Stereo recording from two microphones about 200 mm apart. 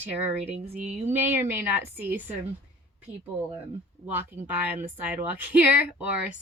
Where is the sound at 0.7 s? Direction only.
40° right (ahead or behind).